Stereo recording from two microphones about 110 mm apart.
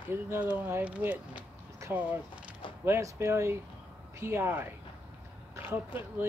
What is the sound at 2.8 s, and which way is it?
Speech, 25° right (ahead or behind).